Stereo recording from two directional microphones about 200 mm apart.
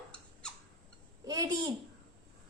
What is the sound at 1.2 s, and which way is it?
Speech, 20° right (ahead or behind).